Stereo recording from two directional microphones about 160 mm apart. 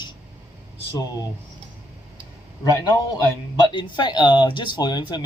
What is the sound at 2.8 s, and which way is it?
Speech, 25° left (ahead or behind).